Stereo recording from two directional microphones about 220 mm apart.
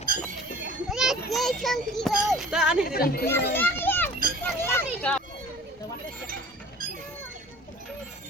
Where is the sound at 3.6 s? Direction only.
10° left (ahead or behind).